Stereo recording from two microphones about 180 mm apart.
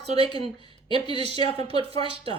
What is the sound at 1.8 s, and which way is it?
Speech, 30° right (ahead or behind).